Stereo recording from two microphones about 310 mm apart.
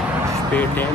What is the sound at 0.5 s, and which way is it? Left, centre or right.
Speech, centre.